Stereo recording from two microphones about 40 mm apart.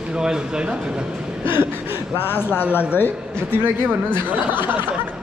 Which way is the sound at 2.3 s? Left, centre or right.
Left.